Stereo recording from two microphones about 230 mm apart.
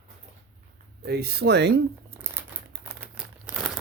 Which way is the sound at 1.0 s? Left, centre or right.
Right.